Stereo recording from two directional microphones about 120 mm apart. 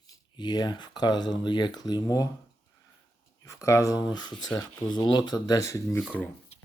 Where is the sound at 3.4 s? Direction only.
25° left (ahead or behind).